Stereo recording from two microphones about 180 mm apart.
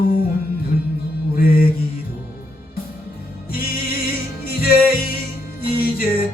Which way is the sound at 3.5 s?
55° left (ahead or behind).